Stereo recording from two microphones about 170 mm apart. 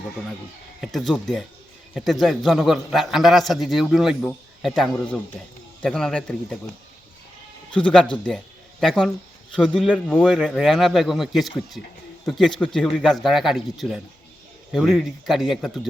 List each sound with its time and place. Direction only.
0.8 s a man's voice: centre (ahead or behind)
7.8 s a man's voice: 5° left (ahead or behind)